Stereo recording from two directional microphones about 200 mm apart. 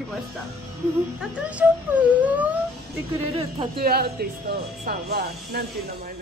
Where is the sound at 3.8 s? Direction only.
50° right (ahead or behind).